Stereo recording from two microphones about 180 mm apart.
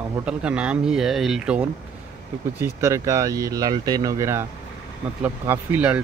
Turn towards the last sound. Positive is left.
turn(degrees=-10)  # may be behind; listen again after turning